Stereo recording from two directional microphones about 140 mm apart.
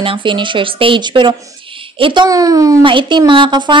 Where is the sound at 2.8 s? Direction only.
35° right (ahead or behind).